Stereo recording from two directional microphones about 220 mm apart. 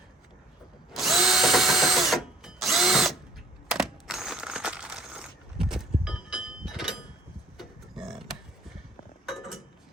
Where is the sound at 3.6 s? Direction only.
Centre (ahead or behind).